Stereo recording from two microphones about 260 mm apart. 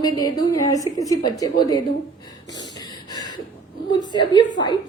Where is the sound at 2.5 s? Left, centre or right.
Centre.